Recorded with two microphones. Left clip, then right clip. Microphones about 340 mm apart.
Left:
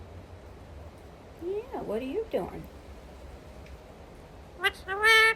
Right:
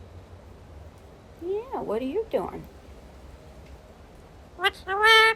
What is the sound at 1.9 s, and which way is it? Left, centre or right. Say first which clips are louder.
Speech: right 4 dB; right.